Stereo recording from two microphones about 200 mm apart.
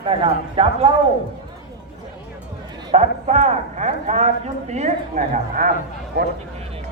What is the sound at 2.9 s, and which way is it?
A man's voice, 35° right (ahead or behind).